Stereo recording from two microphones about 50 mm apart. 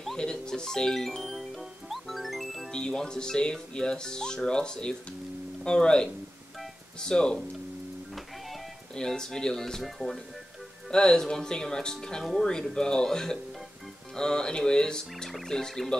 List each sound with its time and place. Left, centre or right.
0.2 s music: centre
2.7 s speech: centre
8.9 s speech: centre
10.9 s speech: centre
15.2 s music: centre